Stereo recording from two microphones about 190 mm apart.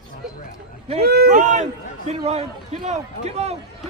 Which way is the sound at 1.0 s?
55° right (ahead or behind).